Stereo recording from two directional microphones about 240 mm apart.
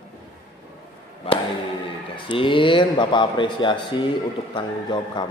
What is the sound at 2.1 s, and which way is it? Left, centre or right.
Speech, left.